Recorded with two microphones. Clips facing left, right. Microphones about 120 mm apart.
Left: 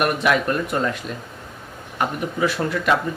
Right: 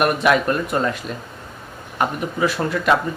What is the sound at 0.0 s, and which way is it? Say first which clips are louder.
Speech: right 2 dB; 35° right (ahead or behind).